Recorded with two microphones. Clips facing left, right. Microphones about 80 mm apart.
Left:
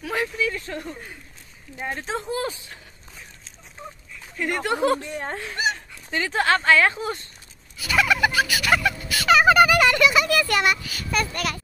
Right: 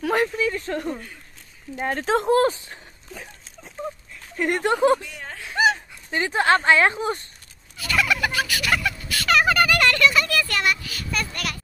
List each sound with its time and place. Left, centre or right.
0.0 s a sound: right
0.4 s speech: right
2.0 s speech: right
4.4 s speech: right
5.0 s speech: left
6.1 s speech: right
7.8 s turkey: centre